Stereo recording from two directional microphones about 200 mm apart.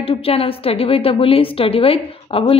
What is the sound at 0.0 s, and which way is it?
A woman's voice, 30° left (ahead or behind).